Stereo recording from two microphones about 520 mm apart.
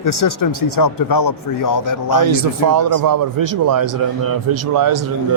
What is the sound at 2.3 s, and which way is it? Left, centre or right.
A man's voice, right.